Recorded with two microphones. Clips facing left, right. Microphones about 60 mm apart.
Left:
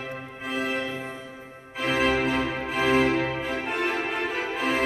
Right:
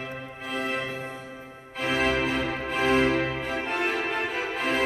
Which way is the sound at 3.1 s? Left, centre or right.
Left.